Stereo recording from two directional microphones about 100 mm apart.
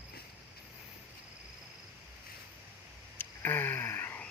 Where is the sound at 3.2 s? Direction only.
20° left (ahead or behind).